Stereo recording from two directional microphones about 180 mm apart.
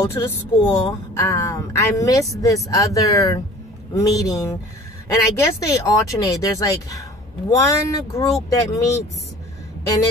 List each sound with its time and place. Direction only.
0.0 s speech: 20° left (ahead or behind)